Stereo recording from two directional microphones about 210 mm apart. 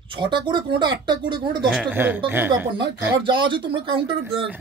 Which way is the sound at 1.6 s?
5° right (ahead or behind).